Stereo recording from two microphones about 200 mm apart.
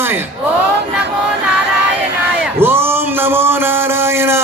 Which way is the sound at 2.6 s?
10° right (ahead or behind).